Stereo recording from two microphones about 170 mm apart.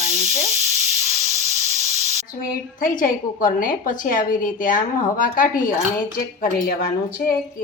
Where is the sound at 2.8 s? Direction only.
50° left (ahead or behind).